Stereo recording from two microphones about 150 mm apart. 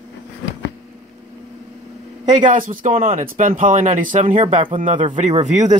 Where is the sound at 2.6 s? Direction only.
65° right (ahead or behind).